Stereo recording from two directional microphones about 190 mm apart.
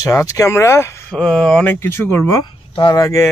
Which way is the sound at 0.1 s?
15° left (ahead or behind).